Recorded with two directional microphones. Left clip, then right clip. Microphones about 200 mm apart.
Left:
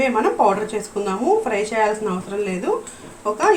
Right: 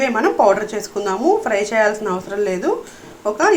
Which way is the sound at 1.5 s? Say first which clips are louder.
Right 3 dB; 35° right (ahead or behind).